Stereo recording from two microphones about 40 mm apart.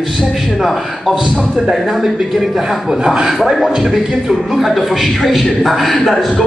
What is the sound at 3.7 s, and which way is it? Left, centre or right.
Speech, centre.